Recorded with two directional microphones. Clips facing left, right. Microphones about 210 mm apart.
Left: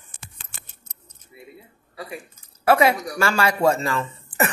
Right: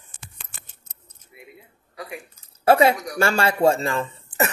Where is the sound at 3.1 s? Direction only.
30° right (ahead or behind).